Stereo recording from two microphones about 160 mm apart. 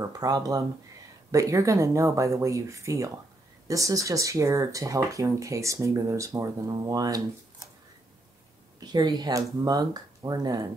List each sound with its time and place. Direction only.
0.0 s speech: 25° right (ahead or behind)
8.7 s speech: 25° right (ahead or behind)